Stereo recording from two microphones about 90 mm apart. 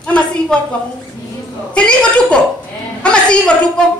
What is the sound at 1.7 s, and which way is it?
A woman's voice, 10° left (ahead or behind).